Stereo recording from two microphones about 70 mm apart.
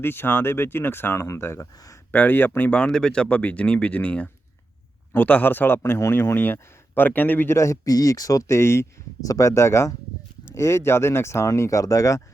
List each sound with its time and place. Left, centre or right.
0.0 s speech: left
2.8 s speech: centre; by 7.5 s left
7.5 s speech: left
9.2 s speech: left